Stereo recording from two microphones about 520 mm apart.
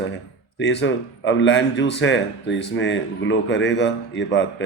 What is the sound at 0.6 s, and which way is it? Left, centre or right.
A man's voice, left.